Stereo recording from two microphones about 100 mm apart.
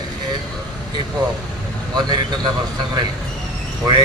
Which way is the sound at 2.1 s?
45° right (ahead or behind).